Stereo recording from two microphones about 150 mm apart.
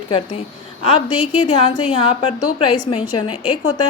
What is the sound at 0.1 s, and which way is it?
A woman's voice, 40° left (ahead or behind).